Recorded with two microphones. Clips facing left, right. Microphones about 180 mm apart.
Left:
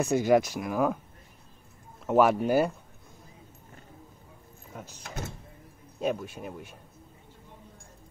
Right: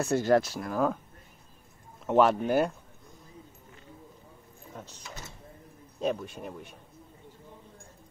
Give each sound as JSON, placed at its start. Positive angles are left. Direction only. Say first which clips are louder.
{"t": 0.0, "sound": "speech", "louder": "left 1 dB", "side_deg": 15}
{"t": 2.0, "sound": "speech", "louder": "left 1 dB", "side_deg": 5}
{"t": 5.0, "sound": "speech", "louder": "left 7 dB", "side_deg": 55}
{"t": 5.9, "sound": "speech", "louder": "even", "side_deg": 5}